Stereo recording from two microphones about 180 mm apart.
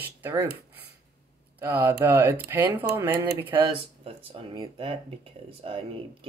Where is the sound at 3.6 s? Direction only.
30° right (ahead or behind).